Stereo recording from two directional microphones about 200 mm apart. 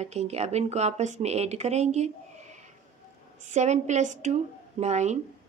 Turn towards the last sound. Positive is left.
turn(degrees=-35)  # may be behind; listen again after turning